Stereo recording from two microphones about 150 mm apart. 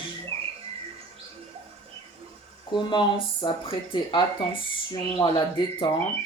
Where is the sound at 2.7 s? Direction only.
30° left (ahead or behind).